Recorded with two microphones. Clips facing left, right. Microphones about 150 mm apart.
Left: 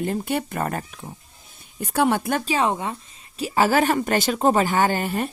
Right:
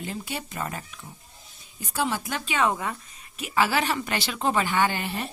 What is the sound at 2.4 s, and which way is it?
Speech, 35° left (ahead or behind).